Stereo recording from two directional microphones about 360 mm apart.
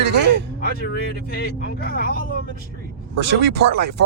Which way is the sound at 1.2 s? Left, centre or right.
Left.